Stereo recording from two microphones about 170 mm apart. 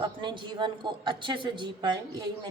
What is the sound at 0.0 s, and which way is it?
Speech, 25° right (ahead or behind).